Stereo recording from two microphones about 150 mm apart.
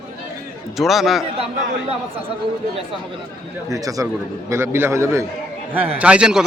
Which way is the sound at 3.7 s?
20° right (ahead or behind).